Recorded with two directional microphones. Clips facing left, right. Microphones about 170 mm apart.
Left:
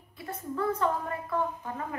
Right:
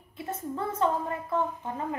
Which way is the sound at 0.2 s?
25° right (ahead or behind).